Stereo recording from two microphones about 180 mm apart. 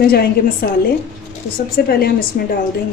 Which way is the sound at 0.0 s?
60° left (ahead or behind).